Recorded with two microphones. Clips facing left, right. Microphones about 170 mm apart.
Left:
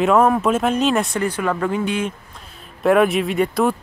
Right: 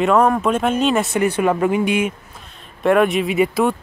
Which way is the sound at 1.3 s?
20° right (ahead or behind).